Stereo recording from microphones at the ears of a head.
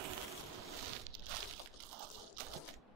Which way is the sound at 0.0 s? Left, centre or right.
Right.